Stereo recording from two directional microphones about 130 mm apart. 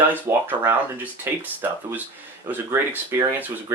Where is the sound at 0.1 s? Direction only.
20° right (ahead or behind).